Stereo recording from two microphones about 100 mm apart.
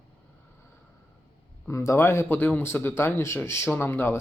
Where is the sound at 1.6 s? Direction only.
30° left (ahead or behind).